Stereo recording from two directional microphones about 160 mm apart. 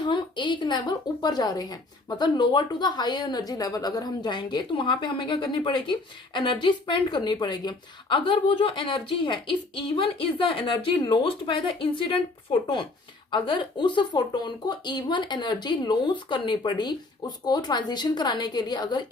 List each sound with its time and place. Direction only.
0.0 s a woman's voice: 30° left (ahead or behind)
13.3 s a woman's voice: 30° left (ahead or behind)